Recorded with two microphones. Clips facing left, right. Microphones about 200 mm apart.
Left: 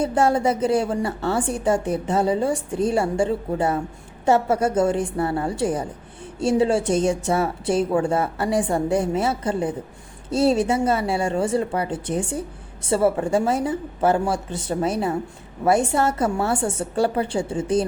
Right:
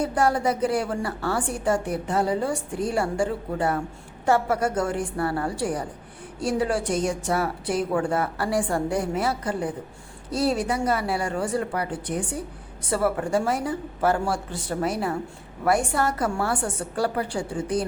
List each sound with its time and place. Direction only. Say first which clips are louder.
0.0 s a woman's voice: left 3 dB; 25° left (ahead or behind)